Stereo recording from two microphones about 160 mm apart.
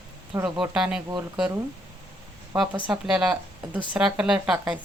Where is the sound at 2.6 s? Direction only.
5° right (ahead or behind).